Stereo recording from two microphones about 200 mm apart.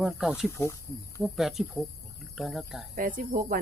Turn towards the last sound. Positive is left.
turn(degrees=-45)  # may be behind; listen again after turning